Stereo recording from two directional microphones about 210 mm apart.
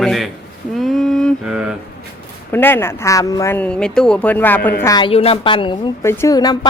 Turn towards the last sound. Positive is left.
turn(degrees=20)  # may be behind; listen again after turning